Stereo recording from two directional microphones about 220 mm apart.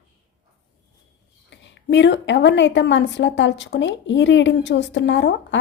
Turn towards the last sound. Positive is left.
turn(degrees=55)  # may be behind; listen again after turning